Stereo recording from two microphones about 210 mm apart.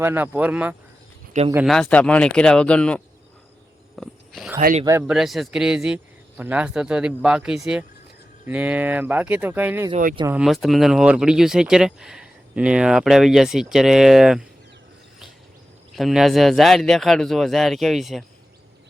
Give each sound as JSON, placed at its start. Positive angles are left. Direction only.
{"t": 0.0, "sound": "speech", "side_deg": -10}
{"t": 4.0, "sound": "a sound", "side_deg": 0}
{"t": 4.9, "sound": "speech", "side_deg": -10}
{"t": 5.1, "sound": "speech", "side_deg": 0}
{"t": 9.9, "sound": "speech", "side_deg": -40}
{"t": 10.3, "sound": "speech", "side_deg": 0}
{"t": 16.0, "sound": "speech", "side_deg": 0}